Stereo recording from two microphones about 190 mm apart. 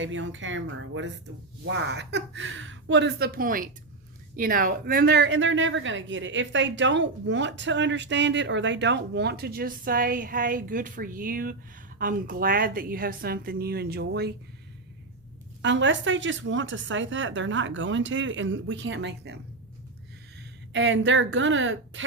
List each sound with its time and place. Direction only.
0.0 s speech: 80° right
1.6 s a woman's voice: 65° right (ahead or behind)
15.6 s speech: 70° right (ahead or behind)
20.7 s speech: 70° right (ahead or behind); by 22.0 s 90° right